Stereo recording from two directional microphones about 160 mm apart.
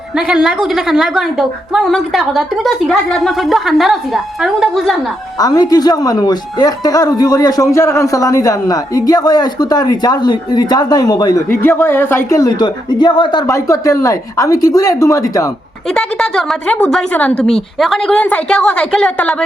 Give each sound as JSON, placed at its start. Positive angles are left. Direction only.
{"t": 0.2, "sound": "a woman's voice", "side_deg": -5}
{"t": 5.4, "sound": "speech", "side_deg": 25}
{"t": 15.9, "sound": "a woman's voice", "side_deg": 5}